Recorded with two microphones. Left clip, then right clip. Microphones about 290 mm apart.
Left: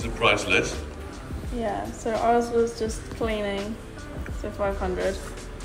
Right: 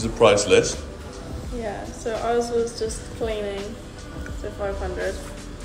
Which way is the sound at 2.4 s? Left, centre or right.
Left.